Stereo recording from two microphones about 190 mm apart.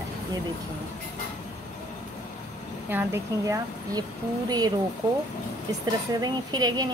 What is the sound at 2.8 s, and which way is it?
Speech, 10° right (ahead or behind).